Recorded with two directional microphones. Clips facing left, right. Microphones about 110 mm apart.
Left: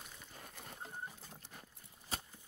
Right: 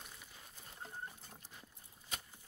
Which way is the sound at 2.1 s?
35° left (ahead or behind).